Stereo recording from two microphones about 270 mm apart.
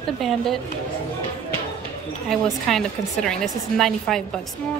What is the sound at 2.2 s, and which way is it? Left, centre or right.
A woman's voice, centre.